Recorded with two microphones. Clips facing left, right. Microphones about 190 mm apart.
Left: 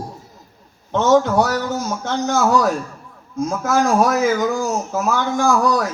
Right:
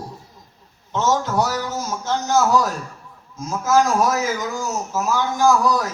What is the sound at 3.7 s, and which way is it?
Speech, 60° left (ahead or behind).